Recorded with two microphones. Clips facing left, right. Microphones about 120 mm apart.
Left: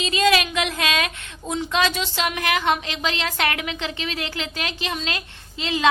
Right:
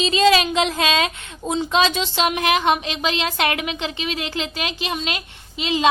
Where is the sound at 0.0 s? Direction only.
25° right (ahead or behind).